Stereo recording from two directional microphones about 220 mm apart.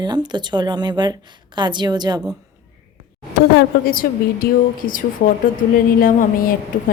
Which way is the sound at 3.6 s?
40° left (ahead or behind).